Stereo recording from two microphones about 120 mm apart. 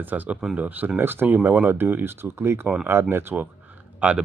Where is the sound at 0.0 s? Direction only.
15° right (ahead or behind).